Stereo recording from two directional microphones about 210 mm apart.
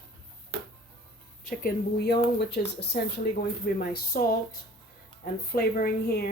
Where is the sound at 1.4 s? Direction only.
45° left (ahead or behind).